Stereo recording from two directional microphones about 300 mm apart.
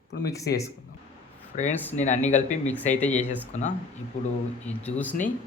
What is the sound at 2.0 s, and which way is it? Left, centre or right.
Speech, left.